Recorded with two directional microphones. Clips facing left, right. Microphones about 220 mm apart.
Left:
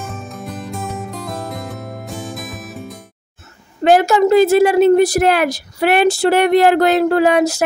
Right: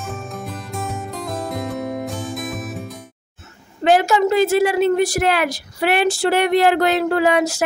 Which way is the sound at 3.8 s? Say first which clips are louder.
Left 4 dB; 45° left (ahead or behind).